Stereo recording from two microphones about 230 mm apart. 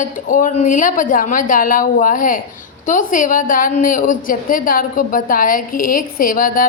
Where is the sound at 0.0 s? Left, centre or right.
Left.